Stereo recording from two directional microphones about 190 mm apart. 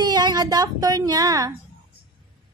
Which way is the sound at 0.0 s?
20° right (ahead or behind).